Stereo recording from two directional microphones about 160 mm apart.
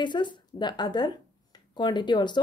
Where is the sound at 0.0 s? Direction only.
30° left (ahead or behind).